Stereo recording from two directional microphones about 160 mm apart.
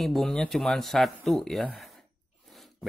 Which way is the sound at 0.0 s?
Centre (ahead or behind).